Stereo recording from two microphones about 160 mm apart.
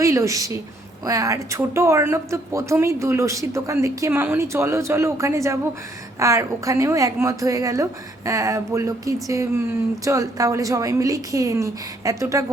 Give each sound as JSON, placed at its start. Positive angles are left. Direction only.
{"t": 0.0, "sound": "a woman's voice", "side_deg": -20}